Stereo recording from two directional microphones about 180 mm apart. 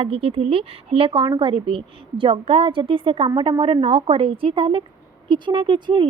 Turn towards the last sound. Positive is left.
turn(degrees=-25)  # may be behind; listen again after turning